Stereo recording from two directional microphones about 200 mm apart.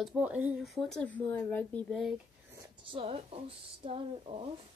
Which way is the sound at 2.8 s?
25° right (ahead or behind).